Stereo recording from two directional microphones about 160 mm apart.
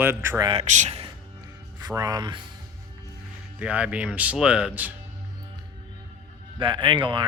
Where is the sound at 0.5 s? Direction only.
45° right (ahead or behind).